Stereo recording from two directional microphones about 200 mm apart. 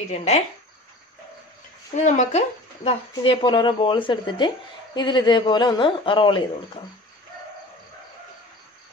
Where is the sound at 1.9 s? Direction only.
35° left (ahead or behind).